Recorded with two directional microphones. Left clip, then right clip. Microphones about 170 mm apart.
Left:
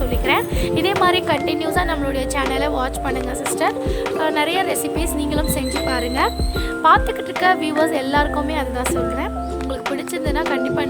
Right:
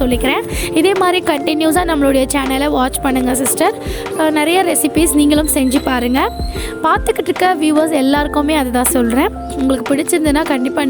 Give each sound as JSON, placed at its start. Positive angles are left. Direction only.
{"t": 0.0, "sound": "speech", "side_deg": -45}
{"t": 6.8, "sound": "a woman's voice", "side_deg": -40}
{"t": 9.6, "sound": "a woman's voice", "side_deg": -40}